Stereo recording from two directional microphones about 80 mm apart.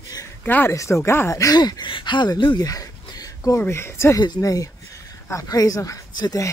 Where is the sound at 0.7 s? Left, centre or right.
Left.